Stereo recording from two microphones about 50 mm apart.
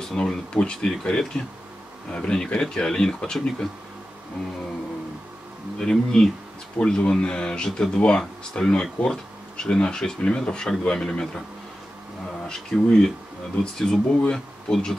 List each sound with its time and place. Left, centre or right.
0.1 s speech: centre
5.8 s speech: centre
6.8 s speech: centre
12.4 s speech: centre
14.1 s speech: left
14.7 s speech: centre